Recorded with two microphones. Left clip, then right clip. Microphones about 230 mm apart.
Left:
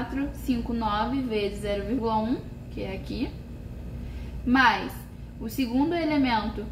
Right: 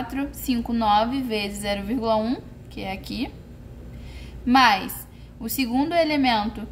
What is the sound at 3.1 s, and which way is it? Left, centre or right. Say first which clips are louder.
Speech: right 1 dB; right.